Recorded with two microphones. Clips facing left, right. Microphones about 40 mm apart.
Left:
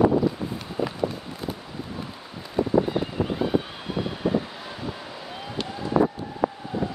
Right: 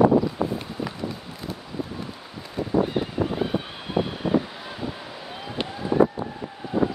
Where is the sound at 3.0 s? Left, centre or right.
Centre.